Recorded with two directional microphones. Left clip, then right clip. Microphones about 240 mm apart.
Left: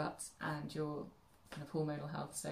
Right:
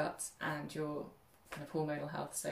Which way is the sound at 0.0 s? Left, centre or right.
Centre.